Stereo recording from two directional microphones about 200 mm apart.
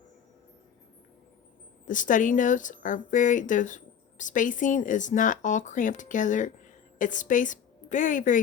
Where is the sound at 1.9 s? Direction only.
40° left (ahead or behind).